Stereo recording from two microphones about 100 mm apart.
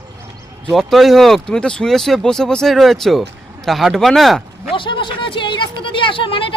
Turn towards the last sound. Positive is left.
turn(degrees=60)  # may be behind; listen again after turning